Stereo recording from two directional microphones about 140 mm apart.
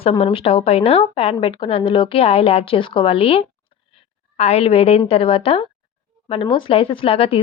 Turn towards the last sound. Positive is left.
turn(degrees=40)  # may be behind; listen again after turning